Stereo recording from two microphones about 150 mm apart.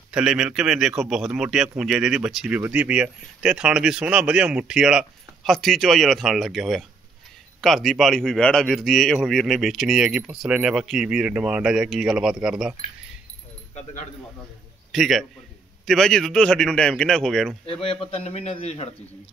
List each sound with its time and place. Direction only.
0.1 s speech: 5° right (ahead or behind)
14.9 s a man's voice: centre (ahead or behind)
17.6 s a man's voice: 40° left (ahead or behind)